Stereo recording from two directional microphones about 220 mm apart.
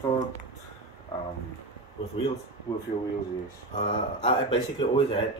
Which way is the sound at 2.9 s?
35° left (ahead or behind).